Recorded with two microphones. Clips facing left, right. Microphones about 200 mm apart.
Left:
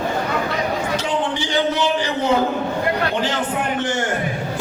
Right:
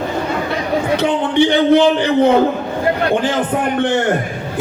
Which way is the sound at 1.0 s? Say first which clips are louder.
Right 8 dB; 60° right (ahead or behind).